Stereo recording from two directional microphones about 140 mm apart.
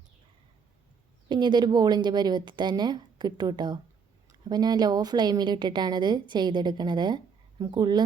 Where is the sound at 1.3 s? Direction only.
30° right (ahead or behind).